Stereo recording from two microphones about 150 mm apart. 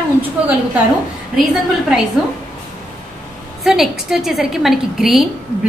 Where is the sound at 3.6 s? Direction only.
5° right (ahead or behind).